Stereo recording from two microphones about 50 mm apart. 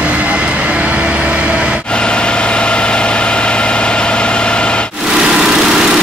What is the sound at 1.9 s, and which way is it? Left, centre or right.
Vehicle, centre.